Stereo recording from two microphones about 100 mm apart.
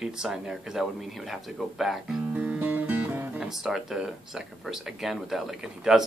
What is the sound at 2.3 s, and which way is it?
Music, 15° right (ahead or behind).